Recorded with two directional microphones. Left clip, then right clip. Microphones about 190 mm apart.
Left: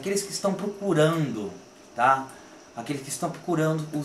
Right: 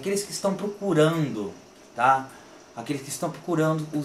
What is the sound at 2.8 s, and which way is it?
Speech, centre (ahead or behind).